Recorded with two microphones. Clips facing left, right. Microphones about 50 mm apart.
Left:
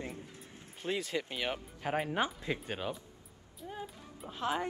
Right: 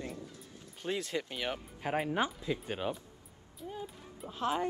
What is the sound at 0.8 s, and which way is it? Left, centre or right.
Speech, centre.